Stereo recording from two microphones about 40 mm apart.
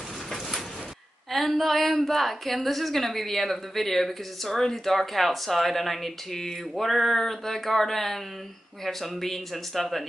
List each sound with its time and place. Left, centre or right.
0.3 s sliding door: centre
1.3 s a woman's voice: centre